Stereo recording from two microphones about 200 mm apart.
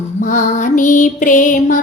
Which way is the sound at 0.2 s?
40° left (ahead or behind).